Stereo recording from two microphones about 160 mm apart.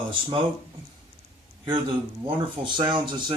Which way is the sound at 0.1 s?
30° right (ahead or behind).